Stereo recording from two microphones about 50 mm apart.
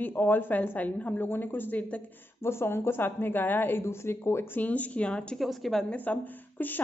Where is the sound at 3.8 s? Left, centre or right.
Left.